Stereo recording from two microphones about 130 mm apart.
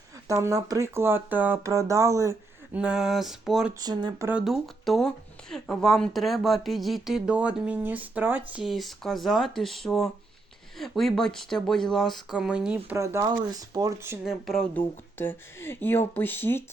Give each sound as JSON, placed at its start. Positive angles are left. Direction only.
{"t": 0.3, "sound": "speech", "side_deg": -25}
{"t": 2.7, "sound": "speech", "side_deg": -5}
{"t": 3.8, "sound": "speech", "side_deg": -35}
{"t": 4.4, "sound": "speech", "side_deg": 0}
{"t": 8.6, "sound": "speech", "side_deg": 0}
{"t": 13.0, "sound": "speech", "side_deg": -25}
{"t": 14.3, "sound": "speech", "side_deg": 0}
{"t": 15.2, "sound": "speech", "side_deg": 15}